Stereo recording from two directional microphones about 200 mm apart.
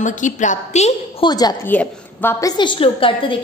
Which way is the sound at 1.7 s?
10° left (ahead or behind).